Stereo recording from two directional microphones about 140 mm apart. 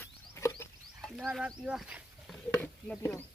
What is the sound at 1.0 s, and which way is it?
Speech, centre (ahead or behind).